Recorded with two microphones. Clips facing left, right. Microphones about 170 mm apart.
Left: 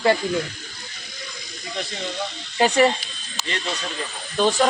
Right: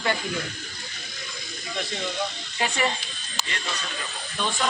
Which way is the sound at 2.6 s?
45° left (ahead or behind).